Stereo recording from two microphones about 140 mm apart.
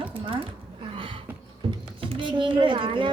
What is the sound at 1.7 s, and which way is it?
Speech, 40° right (ahead or behind).